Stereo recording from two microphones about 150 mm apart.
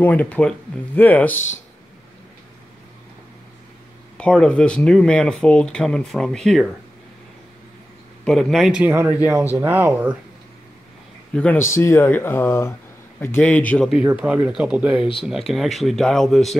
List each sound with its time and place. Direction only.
0.0 s speech: 10° left (ahead or behind)
4.2 s speech: 5° left (ahead or behind)
8.3 s speech: centre (ahead or behind)
11.3 s speech: 15° left (ahead or behind)
14.0 s speech: 10° right (ahead or behind)